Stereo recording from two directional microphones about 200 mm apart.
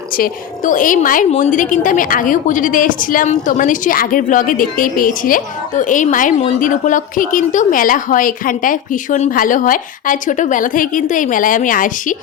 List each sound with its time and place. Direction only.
0.2 s a woman's voice: 40° left (ahead or behind)